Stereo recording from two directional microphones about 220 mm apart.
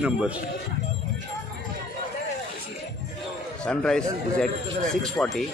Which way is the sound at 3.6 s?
5° left (ahead or behind).